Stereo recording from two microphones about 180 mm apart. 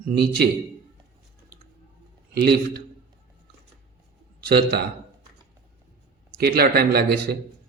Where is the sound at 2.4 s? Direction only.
65° right (ahead or behind).